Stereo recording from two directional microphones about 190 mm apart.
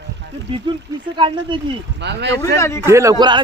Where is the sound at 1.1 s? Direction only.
25° right (ahead or behind).